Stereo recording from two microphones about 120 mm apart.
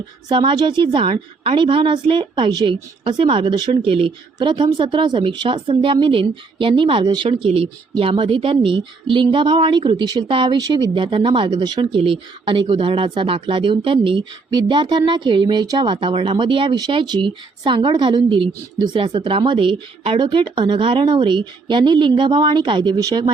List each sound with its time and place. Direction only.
0.3 s a woman's voice: 40° right (ahead or behind)
3.8 s speech: 50° right (ahead or behind)
4.4 s a woman's voice: 40° right (ahead or behind)